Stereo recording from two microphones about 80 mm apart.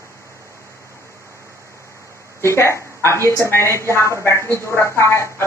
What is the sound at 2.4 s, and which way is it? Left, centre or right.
A woman's voice, left.